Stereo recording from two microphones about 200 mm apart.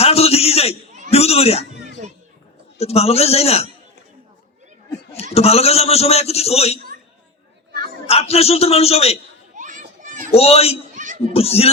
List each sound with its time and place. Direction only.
0.0 s a sound: 30° left (ahead or behind)
2.7 s a man's voice: 30° left (ahead or behind)
5.3 s a man's voice: 30° left (ahead or behind)
8.0 s a man's voice: 30° left (ahead or behind)
9.6 s children playing: 40° right (ahead or behind)
10.3 s a man's voice: 30° left (ahead or behind)
10.9 s a sound: 40° right (ahead or behind)
11.3 s a man's voice: 30° left (ahead or behind)